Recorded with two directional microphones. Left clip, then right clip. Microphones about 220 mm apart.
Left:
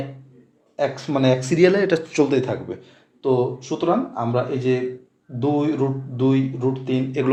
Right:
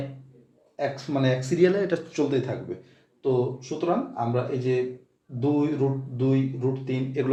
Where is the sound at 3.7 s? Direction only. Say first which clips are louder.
Left 5 dB; 35° left (ahead or behind).